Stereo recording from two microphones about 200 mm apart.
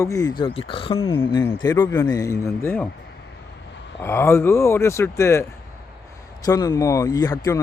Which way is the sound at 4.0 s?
10° left (ahead or behind).